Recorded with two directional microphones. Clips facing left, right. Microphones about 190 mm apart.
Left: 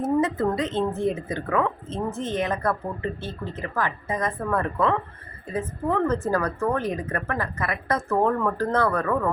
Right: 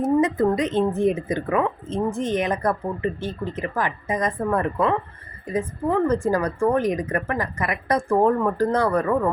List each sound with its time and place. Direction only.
0.0 s a woman's voice: 15° right (ahead or behind)